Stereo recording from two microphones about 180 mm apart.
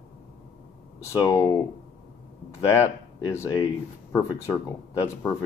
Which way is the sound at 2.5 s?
15° left (ahead or behind).